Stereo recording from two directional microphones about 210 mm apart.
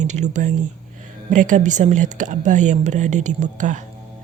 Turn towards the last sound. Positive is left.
turn(degrees=-35)  # may be behind; listen again after turning